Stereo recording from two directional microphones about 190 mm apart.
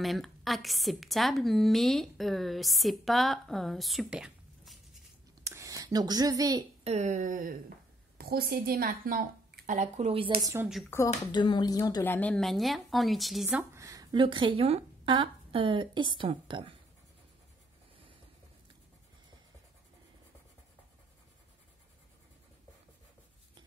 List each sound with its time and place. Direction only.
0.0 s a woman's voice: centre (ahead or behind)
5.4 s a sound: 15° right (ahead or behind)
6.8 s a woman's voice: 35° right (ahead or behind)
10.4 s speech: 15° right (ahead or behind)
11.1 s speech: 25° left (ahead or behind); by 16.7 s 25° right (ahead or behind)